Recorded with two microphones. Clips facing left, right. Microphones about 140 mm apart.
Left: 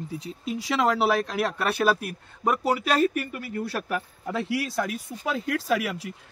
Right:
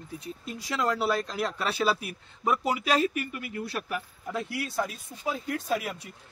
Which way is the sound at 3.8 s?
55° left (ahead or behind).